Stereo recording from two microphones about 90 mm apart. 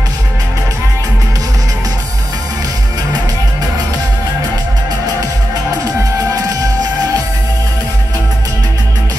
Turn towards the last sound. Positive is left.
turn(degrees=-45)  # may be behind; listen again after turning